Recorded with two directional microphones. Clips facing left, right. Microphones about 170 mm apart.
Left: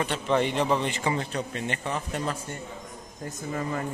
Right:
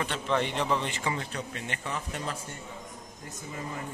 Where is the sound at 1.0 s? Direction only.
30° left (ahead or behind).